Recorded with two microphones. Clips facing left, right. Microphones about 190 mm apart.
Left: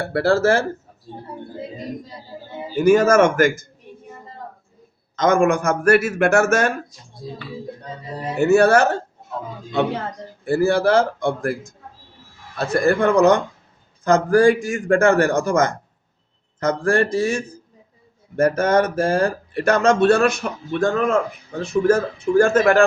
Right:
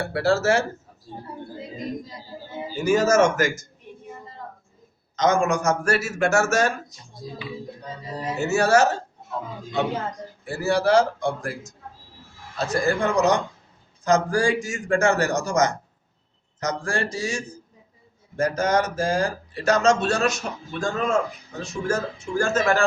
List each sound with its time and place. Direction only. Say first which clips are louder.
0.0 s speech: left 4 dB; 55° left (ahead or behind)
2.8 s speech: left 5 dB; 55° left (ahead or behind)
5.1 s speech: left 4 dB; 55° left (ahead or behind)
8.4 s speech: left 5 dB; 60° left (ahead or behind)
10.4 s speech: left 5 dB; 55° left (ahead or behind)